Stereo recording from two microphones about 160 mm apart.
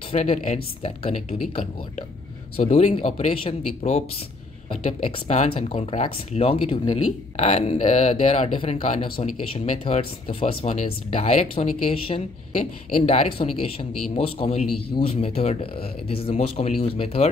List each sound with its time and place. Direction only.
0.1 s a man's voice: 45° left (ahead or behind)
7.3 s a man's voice: 45° left (ahead or behind)